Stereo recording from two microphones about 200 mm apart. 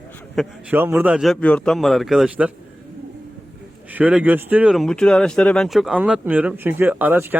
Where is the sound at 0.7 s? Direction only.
10° right (ahead or behind).